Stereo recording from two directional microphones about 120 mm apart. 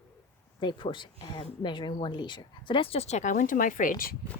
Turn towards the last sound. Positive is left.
turn(degrees=90)